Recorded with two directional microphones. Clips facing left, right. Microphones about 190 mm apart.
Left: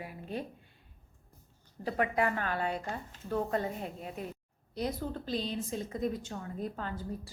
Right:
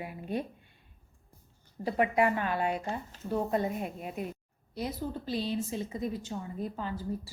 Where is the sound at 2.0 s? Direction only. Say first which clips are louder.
Right 4 dB; 15° right (ahead or behind).